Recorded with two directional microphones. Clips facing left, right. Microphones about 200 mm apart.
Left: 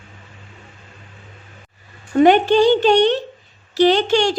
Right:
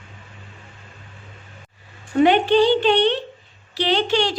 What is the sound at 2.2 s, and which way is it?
A woman's voice, 45° left (ahead or behind).